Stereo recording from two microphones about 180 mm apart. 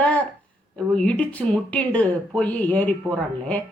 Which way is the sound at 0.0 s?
5° left (ahead or behind).